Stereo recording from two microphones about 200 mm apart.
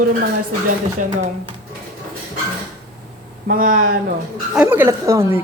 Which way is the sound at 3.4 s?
45° right (ahead or behind).